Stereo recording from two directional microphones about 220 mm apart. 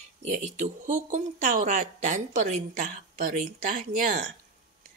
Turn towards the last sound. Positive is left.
turn(degrees=-40)  # may be behind; listen again after turning